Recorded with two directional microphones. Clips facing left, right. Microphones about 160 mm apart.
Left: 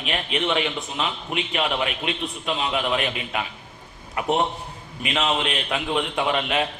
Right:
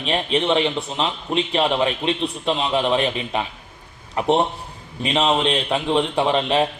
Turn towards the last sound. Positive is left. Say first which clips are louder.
# right 5 dB
turn(degrees=-30)  # may be behind; listen again after turning